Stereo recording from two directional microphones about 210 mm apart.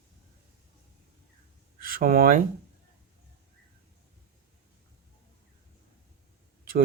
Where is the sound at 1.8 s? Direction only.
45° right (ahead or behind).